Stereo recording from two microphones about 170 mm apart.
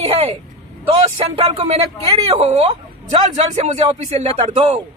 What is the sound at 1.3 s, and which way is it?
Speech, 35° right (ahead or behind).